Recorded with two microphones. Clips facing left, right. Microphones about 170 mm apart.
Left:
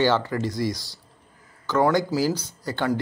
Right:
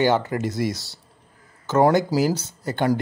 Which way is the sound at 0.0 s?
20° right (ahead or behind).